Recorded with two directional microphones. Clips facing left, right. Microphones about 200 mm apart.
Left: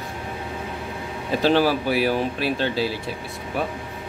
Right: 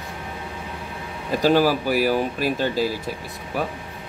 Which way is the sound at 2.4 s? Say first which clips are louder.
Right 1 dB; 45° right (ahead or behind).